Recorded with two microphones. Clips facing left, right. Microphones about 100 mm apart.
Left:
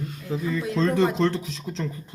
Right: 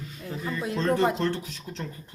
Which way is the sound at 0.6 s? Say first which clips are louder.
Left 2 dB; 30° right (ahead or behind).